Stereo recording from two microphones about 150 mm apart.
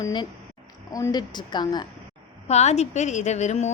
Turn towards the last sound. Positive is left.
turn(degrees=50)  # may be behind; listen again after turning